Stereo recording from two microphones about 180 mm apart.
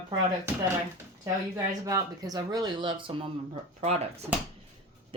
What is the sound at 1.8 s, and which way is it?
Speech, 20° right (ahead or behind).